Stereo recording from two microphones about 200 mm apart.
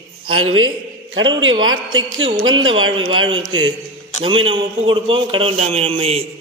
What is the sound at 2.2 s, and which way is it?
Speech, 30° right (ahead or behind).